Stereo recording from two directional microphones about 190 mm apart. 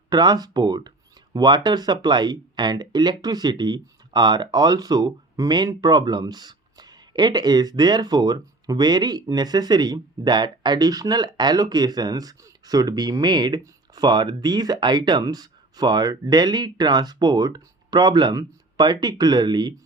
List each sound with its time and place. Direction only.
0.1 s speech: 20° right (ahead or behind)